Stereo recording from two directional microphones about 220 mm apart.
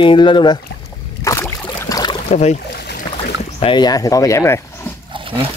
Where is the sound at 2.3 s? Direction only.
30° left (ahead or behind); by 4.6 s 15° left (ahead or behind).